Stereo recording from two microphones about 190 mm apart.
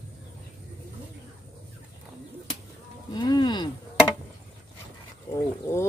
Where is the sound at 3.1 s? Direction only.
20° left (ahead or behind).